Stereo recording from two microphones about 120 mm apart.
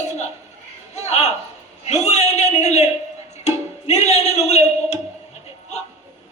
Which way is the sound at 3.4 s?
65° left (ahead or behind).